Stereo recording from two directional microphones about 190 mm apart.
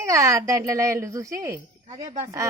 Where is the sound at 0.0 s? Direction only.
15° right (ahead or behind).